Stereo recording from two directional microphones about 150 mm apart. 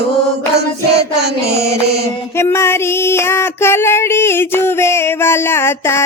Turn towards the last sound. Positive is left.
turn(degrees=15)  # may be behind; listen again after turning